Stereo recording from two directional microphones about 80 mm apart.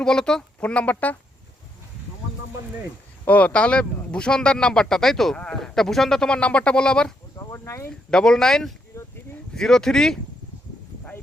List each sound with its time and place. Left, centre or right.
0.0 s speech: centre
3.2 s speech: centre
7.5 s speech: left
8.1 s speech: centre
8.9 s a sound: left
9.6 s speech: centre